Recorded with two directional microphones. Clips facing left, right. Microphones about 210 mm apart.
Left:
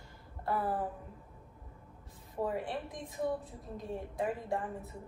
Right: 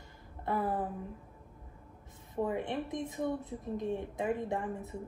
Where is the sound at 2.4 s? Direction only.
20° right (ahead or behind).